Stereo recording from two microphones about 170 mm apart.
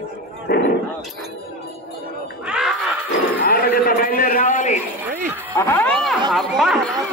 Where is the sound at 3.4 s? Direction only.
65° left (ahead or behind); by 4.7 s 45° left (ahead or behind).